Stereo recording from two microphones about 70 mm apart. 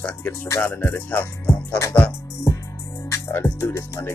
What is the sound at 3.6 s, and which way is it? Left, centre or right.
Speech, left.